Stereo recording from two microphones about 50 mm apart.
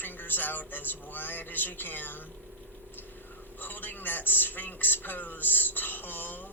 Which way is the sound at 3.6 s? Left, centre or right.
Left.